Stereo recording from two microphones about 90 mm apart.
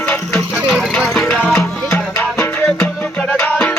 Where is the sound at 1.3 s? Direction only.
20° left (ahead or behind).